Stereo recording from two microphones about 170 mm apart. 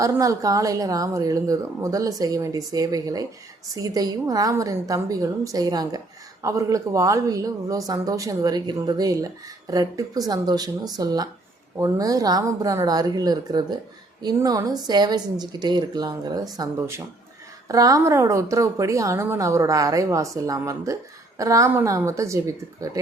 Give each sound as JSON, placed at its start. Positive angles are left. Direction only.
{"t": 0.0, "sound": "a woman's voice", "side_deg": -20}